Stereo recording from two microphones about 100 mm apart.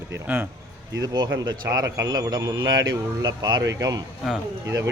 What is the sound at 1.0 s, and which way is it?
A man's voice, 45° right (ahead or behind).